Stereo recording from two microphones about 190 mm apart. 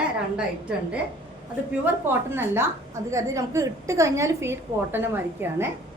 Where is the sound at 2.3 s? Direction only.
15° right (ahead or behind).